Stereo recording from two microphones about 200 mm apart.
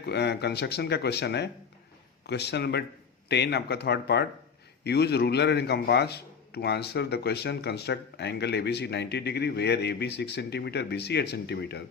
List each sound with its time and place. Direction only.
0.0 s a man's voice: 55° left (ahead or behind)